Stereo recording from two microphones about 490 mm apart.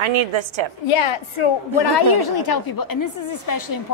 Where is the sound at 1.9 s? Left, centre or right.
Left.